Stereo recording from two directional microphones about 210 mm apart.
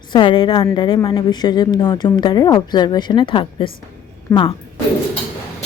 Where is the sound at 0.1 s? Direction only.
20° left (ahead or behind).